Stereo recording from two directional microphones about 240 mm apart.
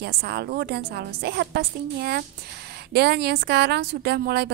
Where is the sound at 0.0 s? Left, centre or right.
Right.